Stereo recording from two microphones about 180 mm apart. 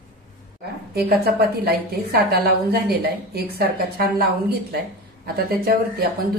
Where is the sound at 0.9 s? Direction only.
60° right (ahead or behind).